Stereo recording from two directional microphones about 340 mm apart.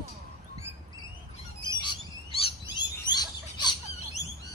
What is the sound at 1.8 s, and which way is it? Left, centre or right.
Bird, centre.